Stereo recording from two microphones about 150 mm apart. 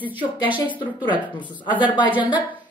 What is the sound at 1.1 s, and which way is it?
Speech, 10° right (ahead or behind).